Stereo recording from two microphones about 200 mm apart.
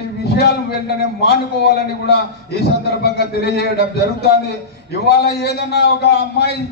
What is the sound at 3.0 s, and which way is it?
Speech, 55° left (ahead or behind).